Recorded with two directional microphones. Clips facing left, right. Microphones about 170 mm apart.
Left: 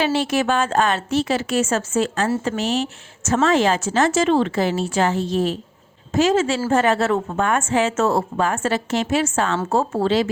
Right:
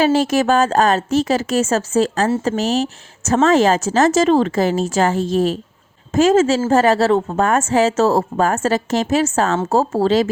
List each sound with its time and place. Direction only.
0.0 s a woman's voice: 45° right (ahead or behind)